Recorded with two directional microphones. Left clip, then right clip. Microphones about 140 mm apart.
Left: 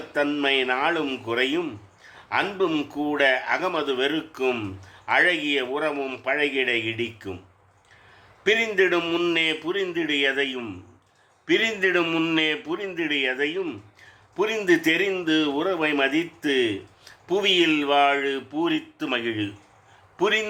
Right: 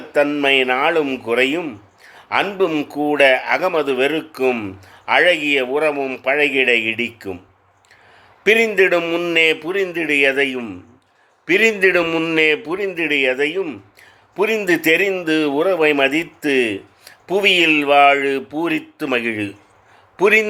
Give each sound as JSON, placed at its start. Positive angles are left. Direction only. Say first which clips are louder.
{"t": 0.1, "sound": "speech", "louder": "right 8 dB", "side_deg": -45}
{"t": 8.4, "sound": "a man's voice", "louder": "right 7 dB", "side_deg": -50}